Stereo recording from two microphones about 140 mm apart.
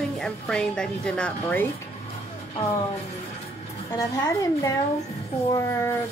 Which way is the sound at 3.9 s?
25° left (ahead or behind).